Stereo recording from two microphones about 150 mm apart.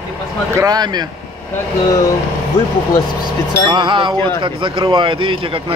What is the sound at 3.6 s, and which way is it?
Speech, 35° right (ahead or behind).